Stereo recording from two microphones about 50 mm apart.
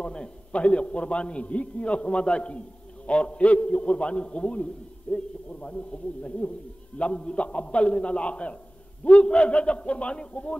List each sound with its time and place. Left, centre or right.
0.0 s a man's voice: centre